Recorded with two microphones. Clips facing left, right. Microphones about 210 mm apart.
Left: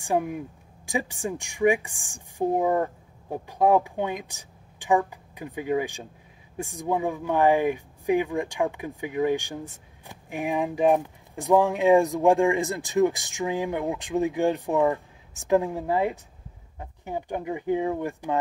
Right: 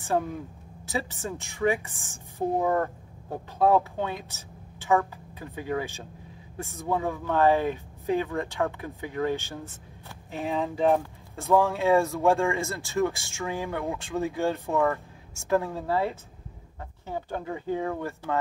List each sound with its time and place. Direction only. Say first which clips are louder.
0.0 s speech: left 2 dB; 15° left (ahead or behind)